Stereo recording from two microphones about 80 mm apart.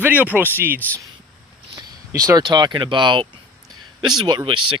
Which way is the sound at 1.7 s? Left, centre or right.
Right.